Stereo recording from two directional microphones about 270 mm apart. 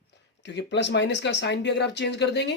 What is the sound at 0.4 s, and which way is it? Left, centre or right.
Speech, left.